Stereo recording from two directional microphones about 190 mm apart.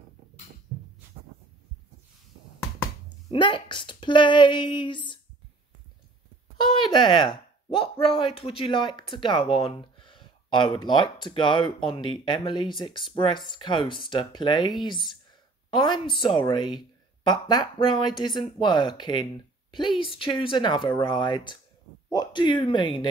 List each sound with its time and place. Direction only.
3.3 s speech: 25° left (ahead or behind)
6.8 s speech: 25° left (ahead or behind)
15.7 s speech: 25° left (ahead or behind)